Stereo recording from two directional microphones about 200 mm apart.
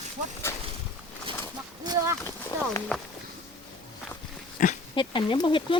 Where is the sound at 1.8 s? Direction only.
20° right (ahead or behind).